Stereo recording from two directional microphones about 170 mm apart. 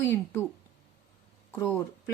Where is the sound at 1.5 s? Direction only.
20° left (ahead or behind).